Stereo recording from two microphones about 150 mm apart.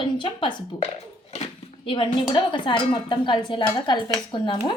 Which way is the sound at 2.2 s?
30° left (ahead or behind).